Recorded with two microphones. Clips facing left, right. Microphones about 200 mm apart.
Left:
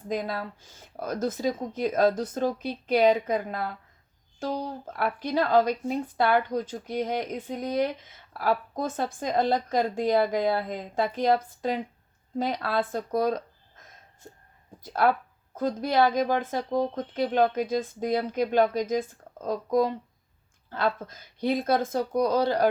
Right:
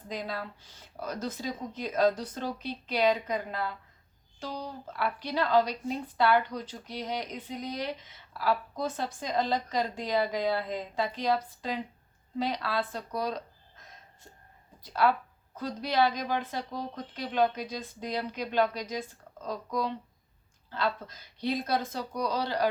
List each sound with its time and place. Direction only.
0.1 s speech: 50° left (ahead or behind)
15.0 s speech: 50° left (ahead or behind)